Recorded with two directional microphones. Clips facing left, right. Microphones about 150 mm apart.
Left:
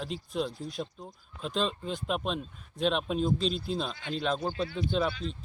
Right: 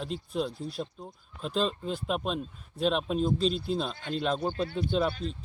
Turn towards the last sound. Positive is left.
turn(degrees=0)  # may be behind; listen again after turning